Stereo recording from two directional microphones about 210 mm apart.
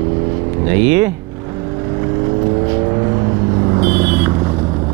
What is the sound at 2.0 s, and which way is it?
Vehicle, 25° right (ahead or behind).